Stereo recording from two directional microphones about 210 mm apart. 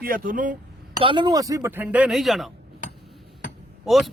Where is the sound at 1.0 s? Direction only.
20° right (ahead or behind); by 2.5 s centre (ahead or behind).